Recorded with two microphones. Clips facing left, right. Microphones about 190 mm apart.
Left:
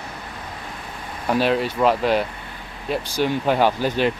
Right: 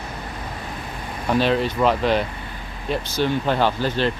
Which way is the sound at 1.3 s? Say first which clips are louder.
Even; 5° left (ahead or behind).